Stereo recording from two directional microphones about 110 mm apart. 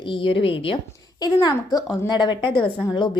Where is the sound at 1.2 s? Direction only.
35° left (ahead or behind).